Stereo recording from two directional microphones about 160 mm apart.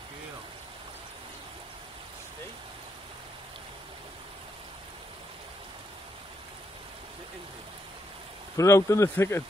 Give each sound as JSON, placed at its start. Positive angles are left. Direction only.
{"t": 8.5, "sound": "speech", "side_deg": 20}